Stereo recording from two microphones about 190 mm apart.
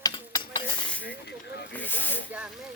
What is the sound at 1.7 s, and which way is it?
Snake, 10° left (ahead or behind).